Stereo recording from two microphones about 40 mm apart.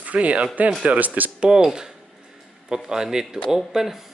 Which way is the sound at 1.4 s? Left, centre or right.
Centre.